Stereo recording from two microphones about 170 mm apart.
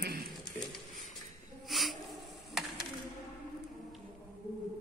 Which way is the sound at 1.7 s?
Centre (ahead or behind).